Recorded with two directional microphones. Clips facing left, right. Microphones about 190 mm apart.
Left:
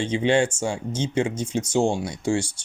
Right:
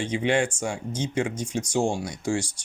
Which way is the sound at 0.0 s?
25° left (ahead or behind).